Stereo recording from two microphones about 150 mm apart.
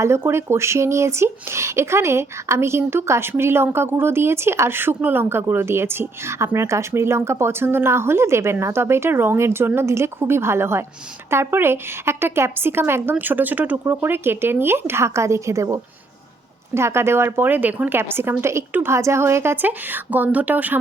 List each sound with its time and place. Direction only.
0.0 s speech: 15° right (ahead or behind)